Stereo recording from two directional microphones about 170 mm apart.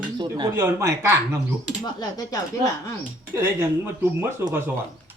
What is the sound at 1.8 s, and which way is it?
Speech, 25° left (ahead or behind).